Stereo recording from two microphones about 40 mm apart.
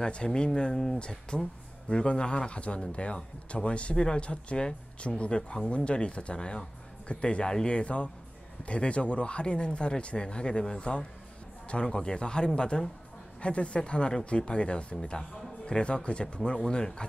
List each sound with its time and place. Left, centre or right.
0.0 s speech: centre